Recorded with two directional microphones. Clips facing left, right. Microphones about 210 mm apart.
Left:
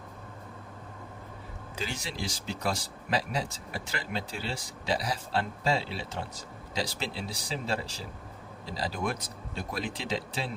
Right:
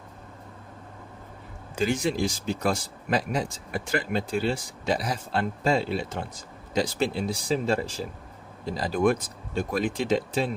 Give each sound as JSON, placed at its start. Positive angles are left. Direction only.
{"t": 1.7, "sound": "speech", "side_deg": -50}